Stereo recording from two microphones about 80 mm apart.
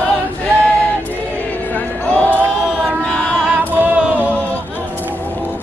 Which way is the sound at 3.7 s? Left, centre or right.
Centre.